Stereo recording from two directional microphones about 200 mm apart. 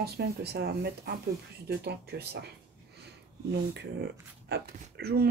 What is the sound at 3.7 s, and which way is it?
Speech, 55° right (ahead or behind).